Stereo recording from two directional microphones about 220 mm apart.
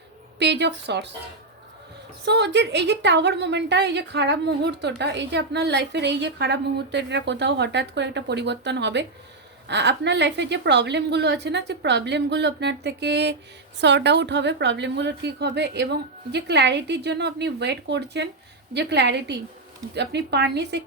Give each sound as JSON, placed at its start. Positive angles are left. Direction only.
{"t": 0.3, "sound": "a woman's voice", "side_deg": -50}
{"t": 2.2, "sound": "a woman's voice", "side_deg": -50}